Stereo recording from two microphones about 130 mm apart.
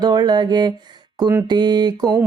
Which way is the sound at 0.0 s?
35° right (ahead or behind).